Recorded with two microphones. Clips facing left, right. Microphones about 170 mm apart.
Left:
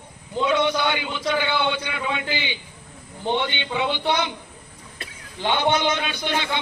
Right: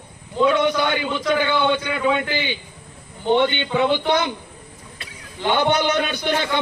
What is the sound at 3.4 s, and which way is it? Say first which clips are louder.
Speech: right 6 dB; 50° right (ahead or behind).